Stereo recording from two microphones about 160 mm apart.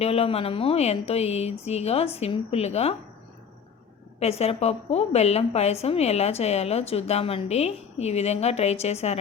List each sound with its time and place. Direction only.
0.0 s a woman's voice: 40° left (ahead or behind)
4.2 s a woman's voice: 40° left (ahead or behind)